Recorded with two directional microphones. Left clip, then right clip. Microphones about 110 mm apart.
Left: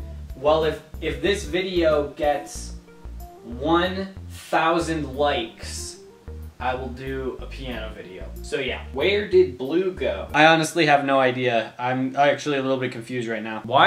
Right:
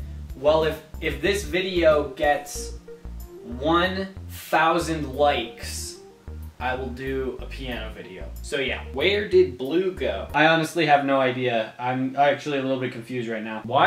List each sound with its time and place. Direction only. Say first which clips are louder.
0.4 s speech: even; centre (ahead or behind)
3.6 s speech: even; 5° right (ahead or behind)
10.3 s speech: left 3 dB; 35° left (ahead or behind)